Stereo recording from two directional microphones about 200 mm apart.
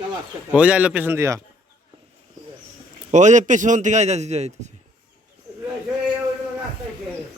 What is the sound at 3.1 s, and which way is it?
A man's voice, 35° right (ahead or behind).